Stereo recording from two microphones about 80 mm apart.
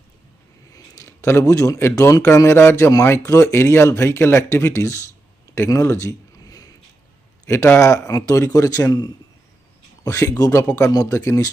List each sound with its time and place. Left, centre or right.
0.7 s a sound: left
1.8 s speech: left
5.5 s a sound: left
7.4 s speech: left
8.9 s a man's voice: left
10.0 s speech: left